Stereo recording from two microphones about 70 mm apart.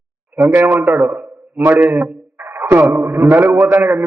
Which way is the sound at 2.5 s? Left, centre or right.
Right.